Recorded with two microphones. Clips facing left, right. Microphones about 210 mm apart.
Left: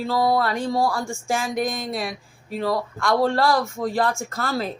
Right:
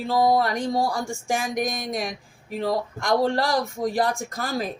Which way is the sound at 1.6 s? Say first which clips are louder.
Left 1 dB; 15° right (ahead or behind).